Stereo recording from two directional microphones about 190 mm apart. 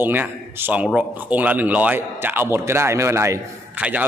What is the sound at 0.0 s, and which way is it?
A man's voice, 10° right (ahead or behind).